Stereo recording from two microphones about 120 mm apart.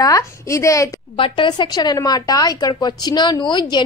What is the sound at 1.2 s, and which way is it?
Speech, 40° left (ahead or behind).